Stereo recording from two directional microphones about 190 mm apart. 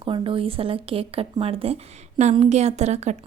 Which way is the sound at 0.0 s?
30° right (ahead or behind).